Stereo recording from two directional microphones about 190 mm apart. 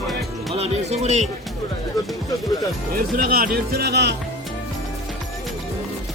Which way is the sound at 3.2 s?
50° right (ahead or behind).